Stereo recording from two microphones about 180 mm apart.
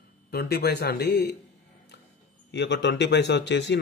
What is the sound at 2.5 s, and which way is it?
Speech, 75° left (ahead or behind).